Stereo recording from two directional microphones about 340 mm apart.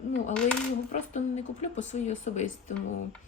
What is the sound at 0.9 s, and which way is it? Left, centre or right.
Speech, centre.